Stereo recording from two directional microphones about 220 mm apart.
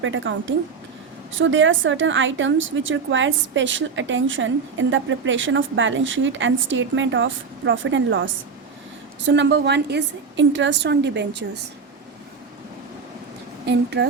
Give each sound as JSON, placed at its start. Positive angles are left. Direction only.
{"t": 0.0, "sound": "a woman's voice", "side_deg": -60}
{"t": 13.7, "sound": "a woman's voice", "side_deg": -50}